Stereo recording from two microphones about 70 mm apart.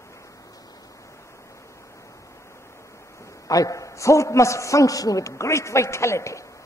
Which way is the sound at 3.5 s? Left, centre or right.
Left.